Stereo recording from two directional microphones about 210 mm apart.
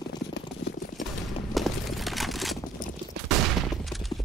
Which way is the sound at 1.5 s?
Centre (ahead or behind).